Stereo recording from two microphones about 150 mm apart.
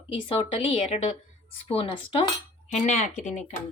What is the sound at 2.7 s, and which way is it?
Speech, 50° left (ahead or behind).